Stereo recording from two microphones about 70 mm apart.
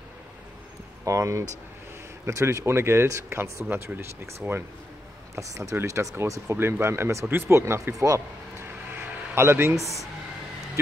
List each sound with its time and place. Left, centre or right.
1.0 s speech: right
5.3 s speech: right
6.4 s speech: right
8.9 s a sound: right